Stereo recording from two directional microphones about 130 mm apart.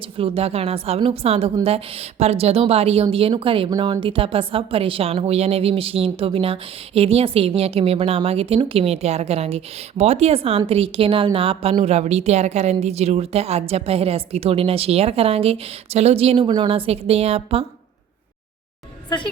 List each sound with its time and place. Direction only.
0.2 s a woman's voice: 50° right (ahead or behind)
3.7 s a woman's voice: 30° right (ahead or behind); by 17.7 s 50° right (ahead or behind)